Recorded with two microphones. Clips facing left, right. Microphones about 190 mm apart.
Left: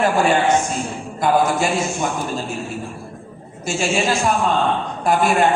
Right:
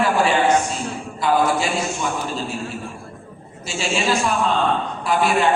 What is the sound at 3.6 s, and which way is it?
A man's voice, 50° left (ahead or behind).